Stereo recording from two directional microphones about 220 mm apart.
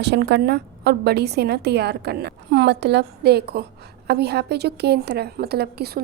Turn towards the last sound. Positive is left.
turn(degrees=-45)  # may be behind; listen again after turning